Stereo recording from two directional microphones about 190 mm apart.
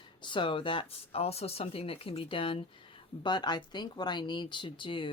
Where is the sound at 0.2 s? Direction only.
25° left (ahead or behind).